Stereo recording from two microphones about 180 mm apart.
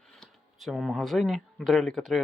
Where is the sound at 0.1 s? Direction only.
Centre (ahead or behind).